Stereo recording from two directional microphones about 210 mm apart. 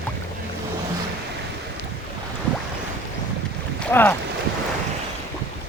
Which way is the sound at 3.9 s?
10° left (ahead or behind).